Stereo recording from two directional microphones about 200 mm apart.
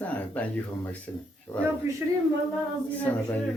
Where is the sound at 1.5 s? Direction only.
20° left (ahead or behind).